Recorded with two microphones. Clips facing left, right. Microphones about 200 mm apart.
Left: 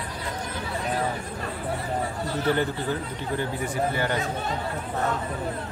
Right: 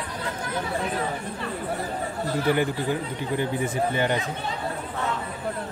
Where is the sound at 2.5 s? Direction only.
15° right (ahead or behind).